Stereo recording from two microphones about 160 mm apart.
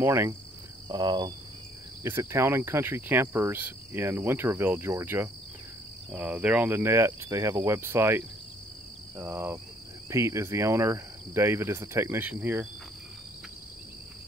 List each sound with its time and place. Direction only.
0.0 s cricket: 15° right (ahead or behind)
2.0 s cricket: 15° right (ahead or behind)